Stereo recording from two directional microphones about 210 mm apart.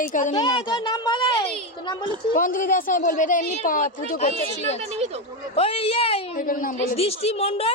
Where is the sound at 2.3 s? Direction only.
40° left (ahead or behind).